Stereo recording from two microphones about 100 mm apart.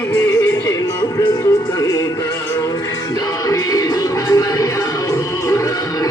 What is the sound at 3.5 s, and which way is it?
Music, 35° left (ahead or behind).